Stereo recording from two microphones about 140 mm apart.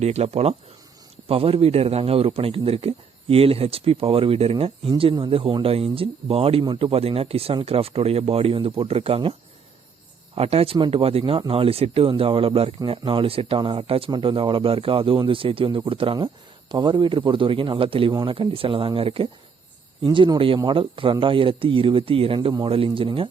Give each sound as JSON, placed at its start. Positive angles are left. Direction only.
{"t": 0.0, "sound": "a man's voice", "side_deg": -50}
{"t": 10.3, "sound": "speech", "side_deg": -45}